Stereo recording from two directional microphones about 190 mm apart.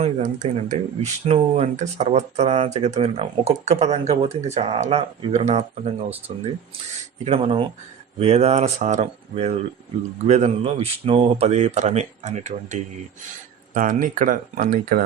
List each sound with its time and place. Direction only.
0.0 s speech: 40° right (ahead or behind)